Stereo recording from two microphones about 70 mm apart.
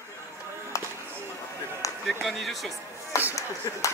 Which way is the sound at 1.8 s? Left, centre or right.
Left.